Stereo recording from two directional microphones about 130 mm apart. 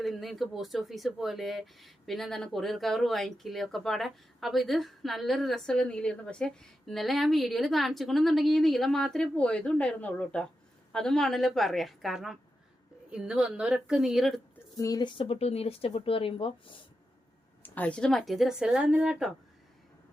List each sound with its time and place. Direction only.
0.0 s speech: centre (ahead or behind)
14.8 s speech: 30° left (ahead or behind)
15.4 s speech: 50° left (ahead or behind)
17.6 s speech: 10° left (ahead or behind); by 19.3 s 5° right (ahead or behind)